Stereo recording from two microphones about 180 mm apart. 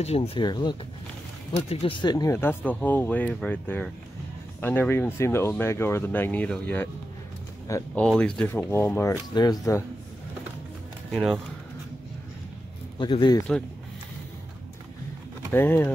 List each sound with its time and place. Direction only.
0.0 s speech: 35° left (ahead or behind); by 8.0 s 15° left (ahead or behind)
8.0 s speech: 5° left (ahead or behind)
11.1 s speech: 5° left (ahead or behind)
13.0 s speech: 25° left (ahead or behind)
15.5 s speech: 10° left (ahead or behind)